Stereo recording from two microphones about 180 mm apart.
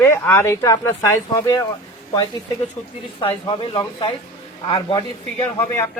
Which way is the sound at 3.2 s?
25° left (ahead or behind).